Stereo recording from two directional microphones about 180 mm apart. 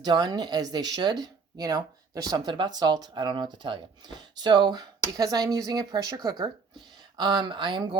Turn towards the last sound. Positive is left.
turn(degrees=-25)  # may be behind; listen again after turning